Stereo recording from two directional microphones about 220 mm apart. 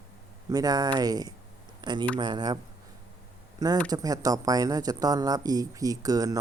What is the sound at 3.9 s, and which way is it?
Speech, 15° right (ahead or behind).